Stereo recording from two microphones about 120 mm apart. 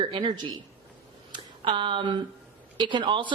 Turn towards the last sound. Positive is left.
turn(degrees=-40)  # may be behind; listen again after turning